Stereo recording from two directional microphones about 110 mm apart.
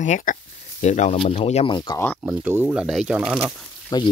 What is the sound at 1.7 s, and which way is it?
Speech, 45° left (ahead or behind).